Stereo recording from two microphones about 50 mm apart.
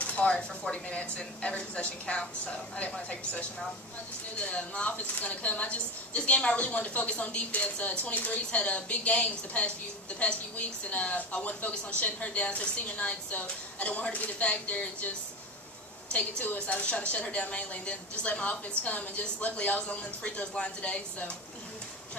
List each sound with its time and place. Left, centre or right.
0.0 s a woman's voice: left
4.5 s a woman's voice: left
10.9 s a woman's voice: left
16.1 s a woman's voice: left